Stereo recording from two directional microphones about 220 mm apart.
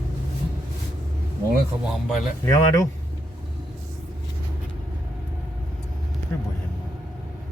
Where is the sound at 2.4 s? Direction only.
15° left (ahead or behind).